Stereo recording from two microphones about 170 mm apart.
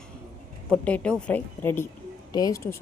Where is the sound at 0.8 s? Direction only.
5° left (ahead or behind).